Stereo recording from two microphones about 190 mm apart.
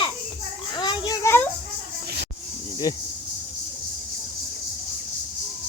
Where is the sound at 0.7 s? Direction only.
25° left (ahead or behind).